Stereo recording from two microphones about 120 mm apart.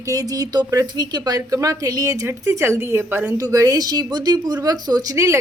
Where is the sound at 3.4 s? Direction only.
30° right (ahead or behind).